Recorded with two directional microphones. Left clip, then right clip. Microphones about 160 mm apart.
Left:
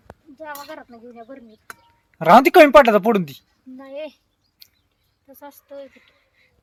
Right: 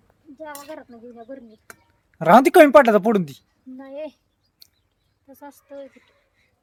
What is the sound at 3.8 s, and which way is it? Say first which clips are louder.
Speech: left 1 dB; 20° right (ahead or behind).